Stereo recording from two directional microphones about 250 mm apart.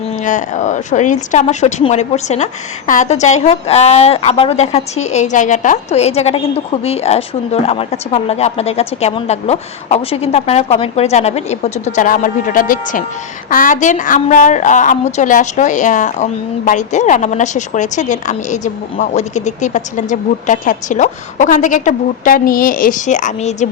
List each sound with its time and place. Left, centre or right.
0.3 s a woman's voice: left